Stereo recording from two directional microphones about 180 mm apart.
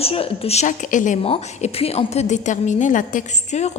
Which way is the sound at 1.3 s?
35° left (ahead or behind).